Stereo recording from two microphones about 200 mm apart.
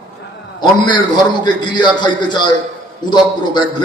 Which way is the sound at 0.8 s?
20° left (ahead or behind).